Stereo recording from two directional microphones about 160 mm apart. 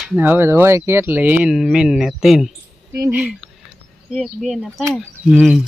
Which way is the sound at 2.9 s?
20° right (ahead or behind).